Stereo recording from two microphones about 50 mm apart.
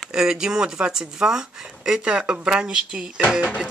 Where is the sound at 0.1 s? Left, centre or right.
Centre.